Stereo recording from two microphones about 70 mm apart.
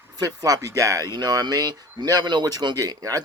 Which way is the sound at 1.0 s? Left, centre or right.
Right.